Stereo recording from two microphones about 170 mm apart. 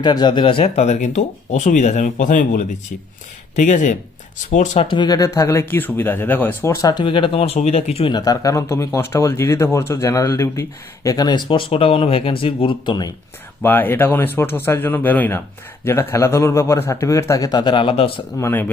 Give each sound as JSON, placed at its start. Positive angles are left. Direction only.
{"t": 0.0, "sound": "speech", "side_deg": 25}
{"t": 8.1, "sound": "a man's voice", "side_deg": 20}
{"t": 13.6, "sound": "a man's voice", "side_deg": 10}
{"t": 18.3, "sound": "a man's voice", "side_deg": 15}